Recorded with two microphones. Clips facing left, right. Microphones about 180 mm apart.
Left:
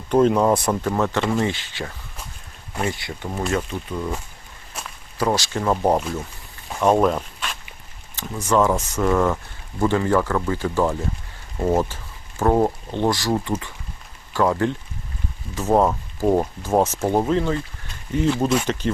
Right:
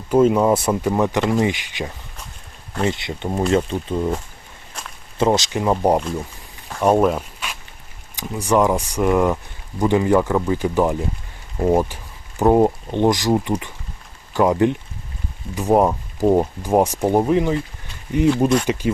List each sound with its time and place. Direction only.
0.1 s speech: 5° right (ahead or behind); by 4.1 s 30° right (ahead or behind)
4.7 s walk: 5° left (ahead or behind)
5.1 s speech: 20° right (ahead or behind)
8.1 s a sound: 15° right (ahead or behind)
8.4 s speech: 15° right (ahead or behind)
18.3 s speech: centre (ahead or behind)
18.6 s speech: 10° right (ahead or behind)